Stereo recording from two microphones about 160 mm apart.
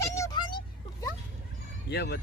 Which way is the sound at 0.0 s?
20° left (ahead or behind).